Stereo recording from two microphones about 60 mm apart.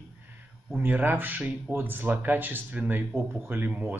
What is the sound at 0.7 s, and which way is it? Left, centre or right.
Speech, right.